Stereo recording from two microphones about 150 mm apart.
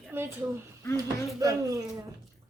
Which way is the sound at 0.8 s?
20° left (ahead or behind).